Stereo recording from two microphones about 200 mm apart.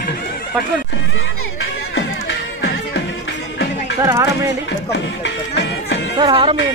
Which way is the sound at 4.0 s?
15° right (ahead or behind).